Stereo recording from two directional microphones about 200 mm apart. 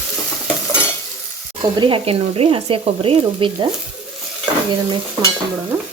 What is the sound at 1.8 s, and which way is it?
Speech, 25° right (ahead or behind).